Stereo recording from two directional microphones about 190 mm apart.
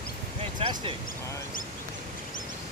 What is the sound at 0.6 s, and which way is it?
Speech, 25° right (ahead or behind).